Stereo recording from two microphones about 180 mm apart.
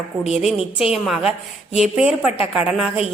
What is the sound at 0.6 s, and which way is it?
Speech, 30° left (ahead or behind).